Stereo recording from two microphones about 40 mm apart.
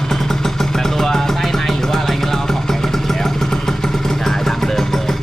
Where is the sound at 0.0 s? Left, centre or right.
Centre.